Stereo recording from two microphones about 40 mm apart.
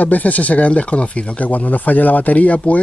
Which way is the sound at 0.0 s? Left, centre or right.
Left.